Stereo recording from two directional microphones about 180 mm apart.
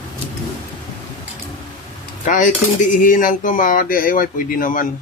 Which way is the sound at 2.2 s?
45° left (ahead or behind).